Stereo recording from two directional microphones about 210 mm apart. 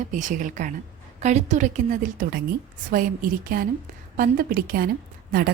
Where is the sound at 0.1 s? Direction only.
35° right (ahead or behind).